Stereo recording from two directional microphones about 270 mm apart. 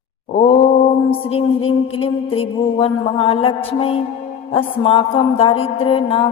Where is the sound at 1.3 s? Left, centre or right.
Left.